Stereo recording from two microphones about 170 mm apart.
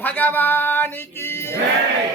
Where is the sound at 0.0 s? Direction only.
10° left (ahead or behind).